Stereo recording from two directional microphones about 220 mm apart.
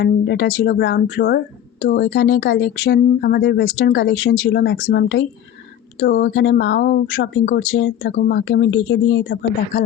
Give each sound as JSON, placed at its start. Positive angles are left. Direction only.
{"t": 0.0, "sound": "speech", "side_deg": 50}